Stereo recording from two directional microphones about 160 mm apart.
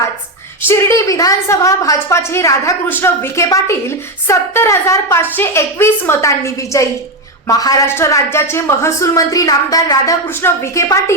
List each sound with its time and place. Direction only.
0.7 s a woman's voice: 20° left (ahead or behind)